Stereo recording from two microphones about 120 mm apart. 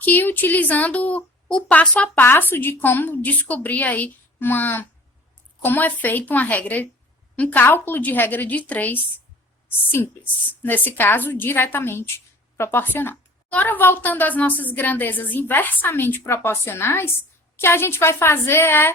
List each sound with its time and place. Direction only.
0.0 s a woman's voice: 15° left (ahead or behind)